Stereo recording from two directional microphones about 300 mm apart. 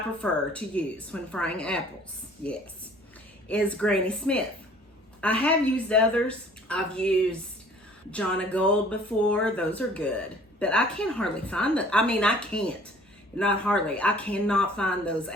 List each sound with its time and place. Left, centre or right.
0.2 s a woman's voice: centre
3.5 s a woman's voice: centre